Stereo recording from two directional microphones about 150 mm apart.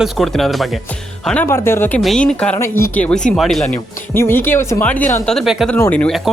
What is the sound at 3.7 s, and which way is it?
Speech, 15° left (ahead or behind).